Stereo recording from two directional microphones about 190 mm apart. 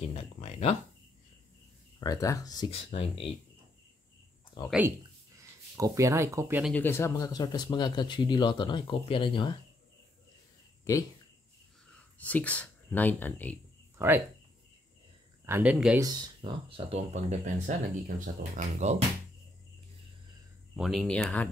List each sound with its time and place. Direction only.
0.0 s speech: 30° left (ahead or behind)
2.0 s speech: 20° left (ahead or behind)
2.9 s speech: 30° left (ahead or behind)
4.6 s speech: 10° right (ahead or behind)
6.6 s speech: 10° left (ahead or behind); by 9.6 s 25° left (ahead or behind)
12.2 s speech: 10° left (ahead or behind)
13.9 s speech: 10° right (ahead or behind)
15.4 s speech: 10° right (ahead or behind)
16.0 s speech: 20° right (ahead or behind); by 19.0 s 35° right (ahead or behind)
20.7 s speech: centre (ahead or behind)